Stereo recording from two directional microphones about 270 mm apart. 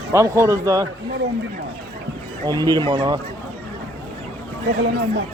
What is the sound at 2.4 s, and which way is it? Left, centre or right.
Speech, centre.